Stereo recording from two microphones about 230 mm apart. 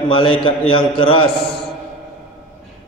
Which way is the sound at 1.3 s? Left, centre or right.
Left.